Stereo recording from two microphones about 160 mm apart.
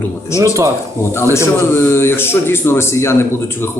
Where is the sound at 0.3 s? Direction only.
15° left (ahead or behind).